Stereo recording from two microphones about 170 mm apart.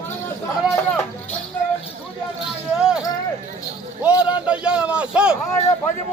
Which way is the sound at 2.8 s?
5° right (ahead or behind).